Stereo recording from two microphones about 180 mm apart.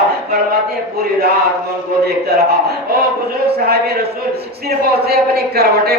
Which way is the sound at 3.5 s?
60° right (ahead or behind).